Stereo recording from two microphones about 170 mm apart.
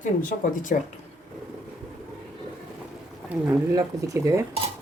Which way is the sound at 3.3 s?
10° right (ahead or behind).